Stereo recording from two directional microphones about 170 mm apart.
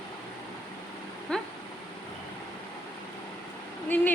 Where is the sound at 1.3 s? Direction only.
5° left (ahead or behind).